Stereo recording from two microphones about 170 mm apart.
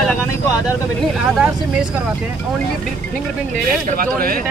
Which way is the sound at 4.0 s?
55° right (ahead or behind).